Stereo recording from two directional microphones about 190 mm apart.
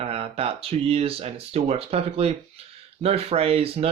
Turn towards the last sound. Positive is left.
turn(degrees=-30)  # may be behind; listen again after turning